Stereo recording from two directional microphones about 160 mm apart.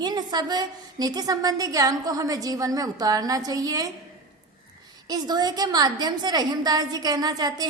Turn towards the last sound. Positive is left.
turn(degrees=-25)  # may be behind; listen again after turning